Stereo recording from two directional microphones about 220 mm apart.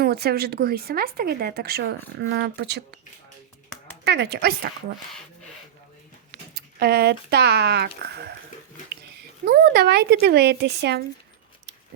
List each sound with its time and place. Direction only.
0.0 s speech: 45° right (ahead or behind)
4.0 s speech: 50° right (ahead or behind)
6.5 s speech: 45° right (ahead or behind)
9.5 s speech: 45° right (ahead or behind)